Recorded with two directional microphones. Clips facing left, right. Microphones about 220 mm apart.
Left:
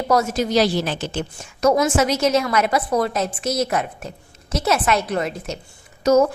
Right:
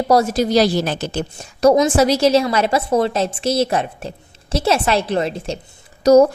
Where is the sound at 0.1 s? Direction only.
35° right (ahead or behind).